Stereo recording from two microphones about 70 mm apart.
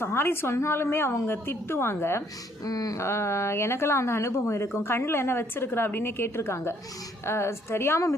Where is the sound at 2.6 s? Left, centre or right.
Left.